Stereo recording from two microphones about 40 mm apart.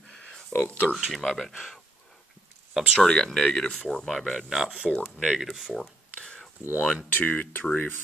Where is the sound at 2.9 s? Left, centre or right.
Centre.